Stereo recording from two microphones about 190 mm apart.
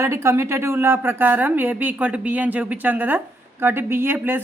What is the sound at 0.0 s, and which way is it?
A woman's voice, 15° right (ahead or behind).